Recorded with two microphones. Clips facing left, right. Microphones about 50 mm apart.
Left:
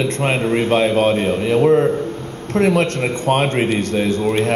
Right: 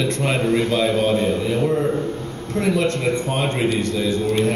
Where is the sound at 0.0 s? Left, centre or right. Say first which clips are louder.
Left 2 dB; left.